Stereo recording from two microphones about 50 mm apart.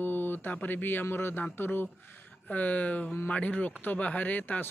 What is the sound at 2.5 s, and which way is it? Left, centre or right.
Speech, left.